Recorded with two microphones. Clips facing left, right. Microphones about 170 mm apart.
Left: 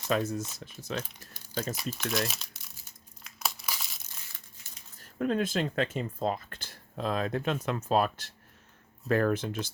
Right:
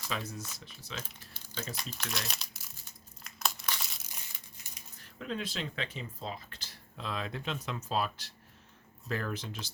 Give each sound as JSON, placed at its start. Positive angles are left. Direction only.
{"t": 0.1, "sound": "speech", "side_deg": 50}
{"t": 1.7, "sound": "speech", "side_deg": 5}
{"t": 3.2, "sound": "crumpling", "side_deg": 0}
{"t": 4.1, "sound": "crumpling", "side_deg": -15}
{"t": 4.9, "sound": "speech", "side_deg": 50}